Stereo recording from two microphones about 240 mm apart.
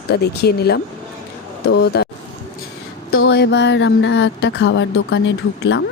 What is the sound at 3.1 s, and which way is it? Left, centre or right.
Speech, left.